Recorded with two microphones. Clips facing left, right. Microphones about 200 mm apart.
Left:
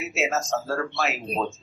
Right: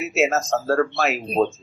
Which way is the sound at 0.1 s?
60° right (ahead or behind).